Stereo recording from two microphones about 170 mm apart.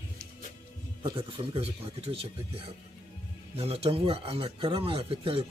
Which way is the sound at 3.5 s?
35° right (ahead or behind).